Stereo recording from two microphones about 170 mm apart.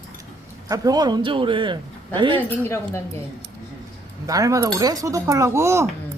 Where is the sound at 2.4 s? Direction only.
15° left (ahead or behind).